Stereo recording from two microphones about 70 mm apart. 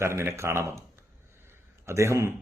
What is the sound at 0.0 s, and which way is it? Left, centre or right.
A man's voice, right.